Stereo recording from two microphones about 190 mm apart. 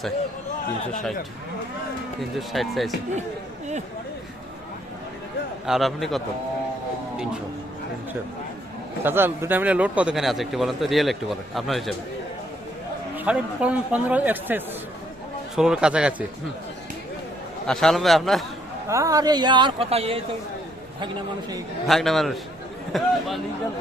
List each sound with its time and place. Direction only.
2.5 s speech: centre (ahead or behind)
5.6 s speech: centre (ahead or behind)
9.0 s speech: 10° right (ahead or behind)
13.1 s a man's voice: 5° right (ahead or behind)
17.7 s speech: 5° left (ahead or behind)
18.9 s speech: 15° right (ahead or behind)
21.8 s speech: centre (ahead or behind)